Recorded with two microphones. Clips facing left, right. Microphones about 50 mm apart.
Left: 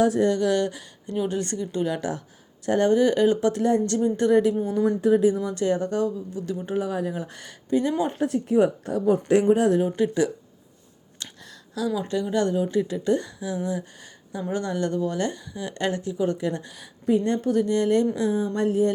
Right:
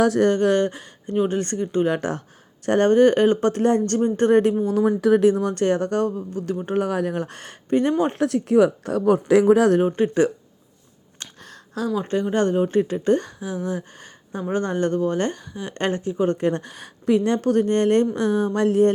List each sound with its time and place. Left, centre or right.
0.0 s speech: right
0.3 s speech: right
4.7 s speech: right
9.7 s speech: right
11.2 s a sound: right
11.9 s speech: right
13.7 s a sound: right
14.5 s speech: right
17.1 s a woman's voice: right
17.5 s speech: right